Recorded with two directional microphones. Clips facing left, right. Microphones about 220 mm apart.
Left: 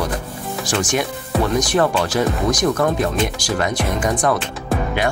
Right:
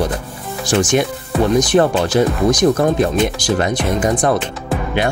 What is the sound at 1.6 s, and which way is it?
Speech, 25° right (ahead or behind).